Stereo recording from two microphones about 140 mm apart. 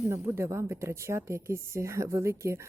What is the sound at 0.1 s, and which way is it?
Speech, 20° right (ahead or behind).